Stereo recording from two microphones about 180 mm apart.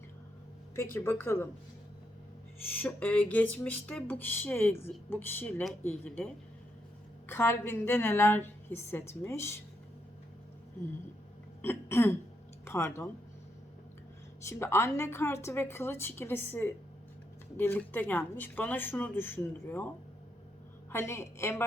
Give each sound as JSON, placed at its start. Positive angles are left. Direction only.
{"t": 0.9, "sound": "a woman's voice", "side_deg": 15}
{"t": 2.7, "sound": "a woman's voice", "side_deg": 10}
{"t": 11.6, "sound": "a woman's voice", "side_deg": 15}
{"t": 14.4, "sound": "a woman's voice", "side_deg": 15}
{"t": 20.9, "sound": "a woman's voice", "side_deg": 15}